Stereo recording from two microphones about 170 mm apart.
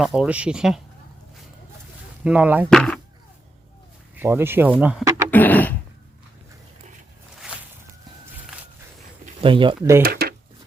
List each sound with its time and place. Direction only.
0.0 s speech: 5° right (ahead or behind)
2.2 s speech: 10° right (ahead or behind)
2.6 s speech: 5° left (ahead or behind)
4.2 s speech: 15° right (ahead or behind)
5.0 s a sound: 15° right (ahead or behind)
5.3 s a sound: 10° left (ahead or behind)
9.4 s speech: 30° right (ahead or behind)
10.0 s speech: 65° right (ahead or behind)